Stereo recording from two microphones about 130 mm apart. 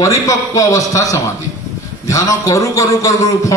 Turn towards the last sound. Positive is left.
turn(degrees=25)  # may be behind; listen again after turning